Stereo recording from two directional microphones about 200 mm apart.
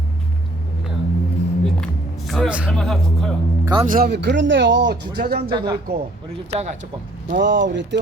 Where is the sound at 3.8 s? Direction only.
50° right (ahead or behind).